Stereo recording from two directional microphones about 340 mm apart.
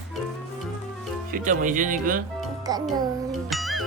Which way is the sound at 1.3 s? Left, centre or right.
Right.